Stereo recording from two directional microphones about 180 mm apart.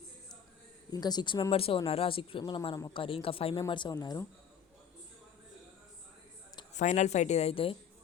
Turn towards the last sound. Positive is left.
turn(degrees=30)  # may be behind; listen again after turning